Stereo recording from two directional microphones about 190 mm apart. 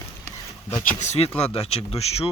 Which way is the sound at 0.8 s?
40° left (ahead or behind).